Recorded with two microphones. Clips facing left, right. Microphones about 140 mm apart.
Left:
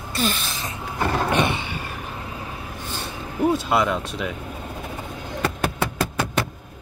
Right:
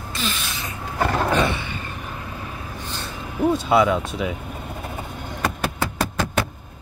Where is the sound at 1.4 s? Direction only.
20° left (ahead or behind).